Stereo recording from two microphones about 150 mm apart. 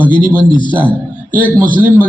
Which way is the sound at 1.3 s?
10° left (ahead or behind).